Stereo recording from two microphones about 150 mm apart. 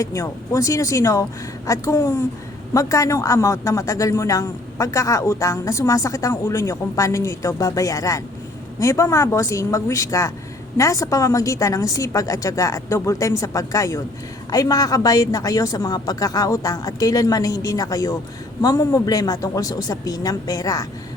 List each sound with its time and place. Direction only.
0.0 s a woman's voice: 20° left (ahead or behind)